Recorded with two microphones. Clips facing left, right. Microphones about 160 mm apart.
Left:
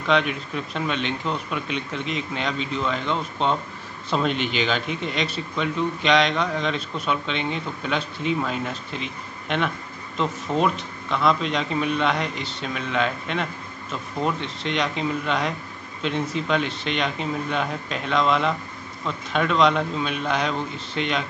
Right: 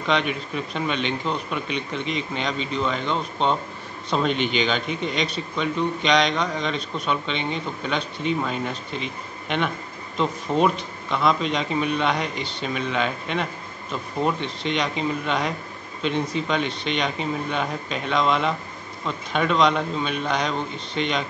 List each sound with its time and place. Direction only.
0.0 s a man's voice: centre (ahead or behind)